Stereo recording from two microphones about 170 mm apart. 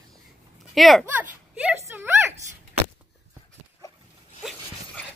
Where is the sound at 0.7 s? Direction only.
Centre (ahead or behind).